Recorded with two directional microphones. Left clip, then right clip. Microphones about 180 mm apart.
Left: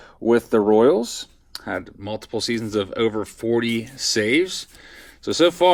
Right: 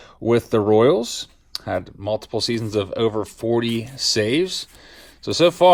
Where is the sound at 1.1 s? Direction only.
40° right (ahead or behind).